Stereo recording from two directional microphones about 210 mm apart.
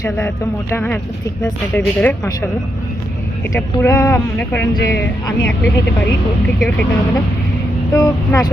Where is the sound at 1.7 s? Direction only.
10° left (ahead or behind).